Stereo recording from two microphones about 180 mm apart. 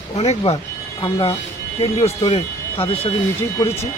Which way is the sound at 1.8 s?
35° left (ahead or behind).